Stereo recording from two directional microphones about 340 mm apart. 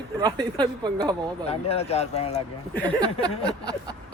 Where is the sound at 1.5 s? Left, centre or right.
Centre.